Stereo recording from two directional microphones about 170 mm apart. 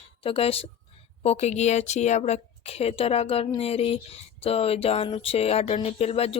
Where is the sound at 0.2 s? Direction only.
35° left (ahead or behind).